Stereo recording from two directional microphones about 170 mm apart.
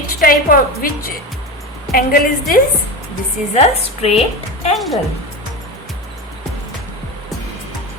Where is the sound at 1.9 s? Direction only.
60° left (ahead or behind).